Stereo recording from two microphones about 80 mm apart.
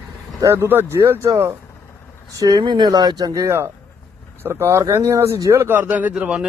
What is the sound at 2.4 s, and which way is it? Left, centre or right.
Speech, right.